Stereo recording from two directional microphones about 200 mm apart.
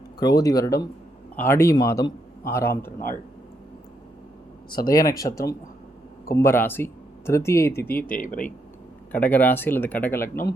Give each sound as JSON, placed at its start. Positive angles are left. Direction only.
{"t": 0.2, "sound": "speech", "side_deg": 20}
{"t": 4.8, "sound": "speech", "side_deg": 20}
{"t": 7.9, "sound": "speech", "side_deg": 45}
{"t": 9.1, "sound": "speech", "side_deg": 10}
{"t": 10.2, "sound": "speech", "side_deg": 45}